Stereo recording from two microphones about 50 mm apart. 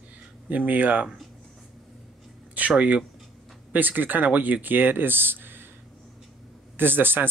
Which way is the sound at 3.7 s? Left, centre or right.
Right.